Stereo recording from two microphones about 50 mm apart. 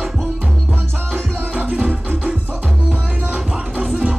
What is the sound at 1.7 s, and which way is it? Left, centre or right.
Music, right.